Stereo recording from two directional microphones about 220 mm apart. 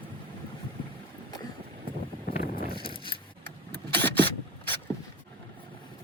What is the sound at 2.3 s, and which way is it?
Vehicle, 40° left (ahead or behind).